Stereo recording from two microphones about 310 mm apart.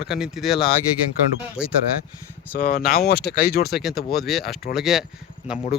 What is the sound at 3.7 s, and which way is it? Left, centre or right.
Speech, centre.